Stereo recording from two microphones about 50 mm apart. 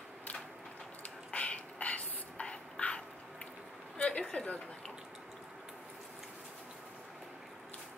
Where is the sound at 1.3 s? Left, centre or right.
Left.